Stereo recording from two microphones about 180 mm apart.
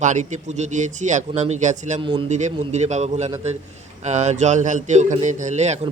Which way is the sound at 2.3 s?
40° right (ahead or behind).